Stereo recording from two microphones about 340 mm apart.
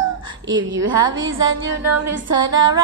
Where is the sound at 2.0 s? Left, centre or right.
Centre.